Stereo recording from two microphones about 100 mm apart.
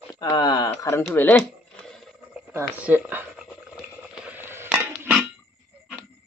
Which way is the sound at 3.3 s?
5° right (ahead or behind).